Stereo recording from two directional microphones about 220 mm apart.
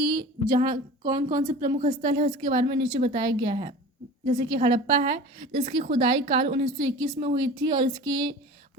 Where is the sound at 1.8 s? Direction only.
40° right (ahead or behind).